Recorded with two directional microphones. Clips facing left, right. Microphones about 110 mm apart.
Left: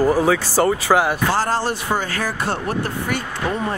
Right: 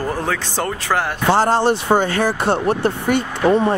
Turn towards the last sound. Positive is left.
turn(degrees=-25)  # may be behind; listen again after turning